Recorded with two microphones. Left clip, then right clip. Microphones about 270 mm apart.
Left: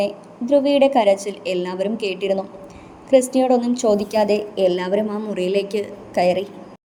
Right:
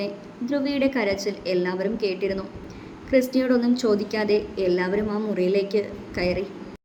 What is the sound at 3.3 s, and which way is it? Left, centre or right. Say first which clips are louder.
A woman's voice: left 5 dB; centre.